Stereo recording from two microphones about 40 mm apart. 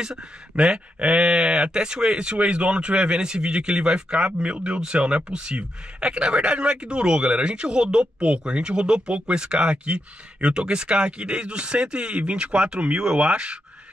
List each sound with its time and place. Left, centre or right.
0.0 s speech: right